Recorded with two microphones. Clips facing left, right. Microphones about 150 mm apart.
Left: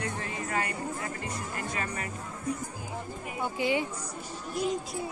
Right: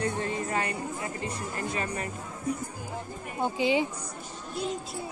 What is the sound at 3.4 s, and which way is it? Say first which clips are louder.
Speech: right 3 dB; 20° right (ahead or behind).